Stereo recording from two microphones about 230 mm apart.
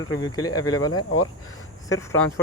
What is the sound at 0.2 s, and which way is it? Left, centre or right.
Speech, centre.